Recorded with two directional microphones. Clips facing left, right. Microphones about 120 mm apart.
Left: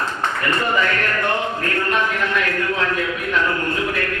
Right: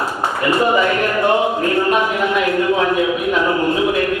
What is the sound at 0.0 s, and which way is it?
A man's voice, 10° right (ahead or behind).